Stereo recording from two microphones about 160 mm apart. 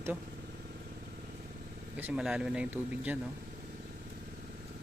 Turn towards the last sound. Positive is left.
turn(degrees=-10)  # may be behind; listen again after turning